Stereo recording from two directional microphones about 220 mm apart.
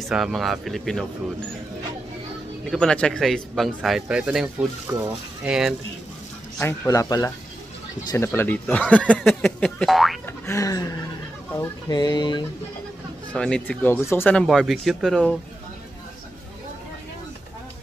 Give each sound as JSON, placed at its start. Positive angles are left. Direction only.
{"t": 0.0, "sound": "speech", "side_deg": 0}
{"t": 2.7, "sound": "speech", "side_deg": 5}
{"t": 6.6, "sound": "speech", "side_deg": 10}
{"t": 10.4, "sound": "speech", "side_deg": 15}
{"t": 13.3, "sound": "speech", "side_deg": 5}